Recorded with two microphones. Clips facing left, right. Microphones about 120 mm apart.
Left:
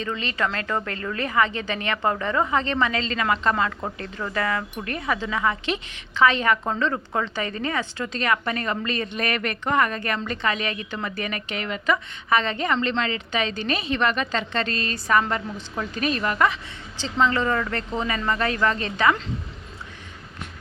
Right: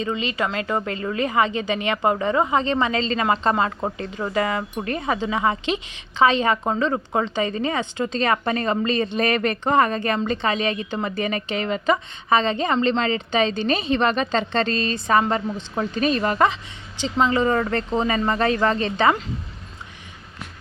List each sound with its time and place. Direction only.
0.0 s a woman's voice: 15° right (ahead or behind)
17.0 s a woman's voice: 15° right (ahead or behind)